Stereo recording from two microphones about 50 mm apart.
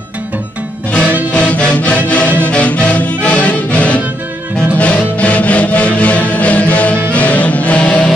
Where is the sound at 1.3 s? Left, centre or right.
Left.